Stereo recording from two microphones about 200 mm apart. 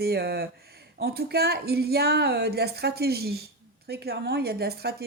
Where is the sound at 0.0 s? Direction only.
50° right (ahead or behind).